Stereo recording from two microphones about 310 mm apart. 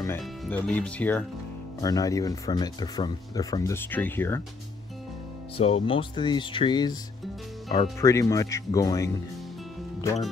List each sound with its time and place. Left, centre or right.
0.0 s speech: centre
5.6 s speech: centre